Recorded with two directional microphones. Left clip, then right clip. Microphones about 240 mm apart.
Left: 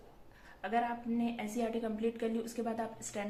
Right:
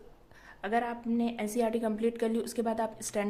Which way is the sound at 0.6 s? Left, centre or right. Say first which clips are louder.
Right 3 dB; right.